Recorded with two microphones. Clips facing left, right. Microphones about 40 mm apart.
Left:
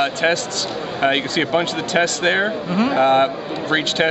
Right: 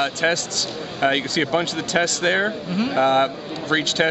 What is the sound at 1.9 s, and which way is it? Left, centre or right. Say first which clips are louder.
Speech: left 2 dB; left.